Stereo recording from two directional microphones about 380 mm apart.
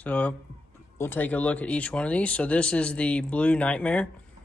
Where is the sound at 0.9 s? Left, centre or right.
Centre.